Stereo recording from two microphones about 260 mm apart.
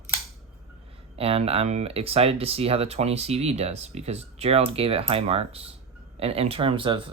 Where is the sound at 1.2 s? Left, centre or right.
Right.